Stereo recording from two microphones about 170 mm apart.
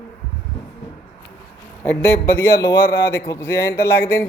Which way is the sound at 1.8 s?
15° left (ahead or behind).